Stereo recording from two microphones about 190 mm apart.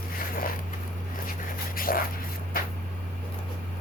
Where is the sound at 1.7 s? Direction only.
50° left (ahead or behind).